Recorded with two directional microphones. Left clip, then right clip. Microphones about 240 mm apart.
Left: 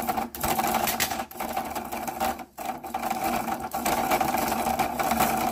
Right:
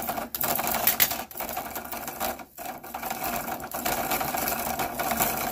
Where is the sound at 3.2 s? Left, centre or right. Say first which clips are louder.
Left 4 dB; centre.